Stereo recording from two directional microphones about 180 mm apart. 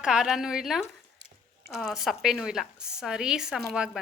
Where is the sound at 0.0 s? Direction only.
5° right (ahead or behind).